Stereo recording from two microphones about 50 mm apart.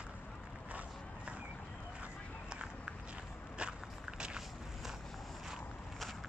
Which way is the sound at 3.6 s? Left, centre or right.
Centre.